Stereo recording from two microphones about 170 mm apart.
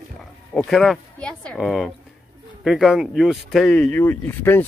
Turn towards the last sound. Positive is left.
turn(degrees=10)  # may be behind; listen again after turning